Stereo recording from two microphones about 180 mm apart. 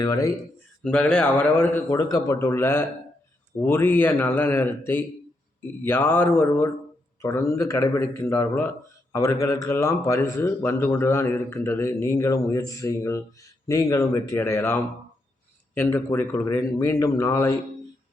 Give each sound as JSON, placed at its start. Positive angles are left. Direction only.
{"t": 0.0, "sound": "speech", "side_deg": 20}
{"t": 0.8, "sound": "a man's voice", "side_deg": 5}